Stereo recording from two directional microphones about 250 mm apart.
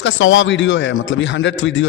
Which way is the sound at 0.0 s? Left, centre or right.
Left.